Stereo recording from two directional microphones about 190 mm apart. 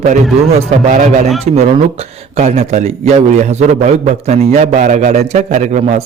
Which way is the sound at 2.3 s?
35° right (ahead or behind).